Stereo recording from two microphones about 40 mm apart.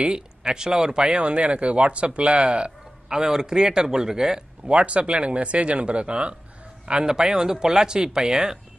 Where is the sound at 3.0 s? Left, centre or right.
Centre.